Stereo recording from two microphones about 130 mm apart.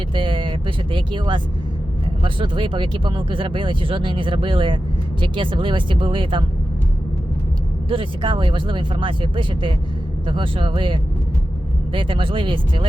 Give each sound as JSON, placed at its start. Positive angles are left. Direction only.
{"t": 0.1, "sound": "speech", "side_deg": -40}
{"t": 7.9, "sound": "speech", "side_deg": -40}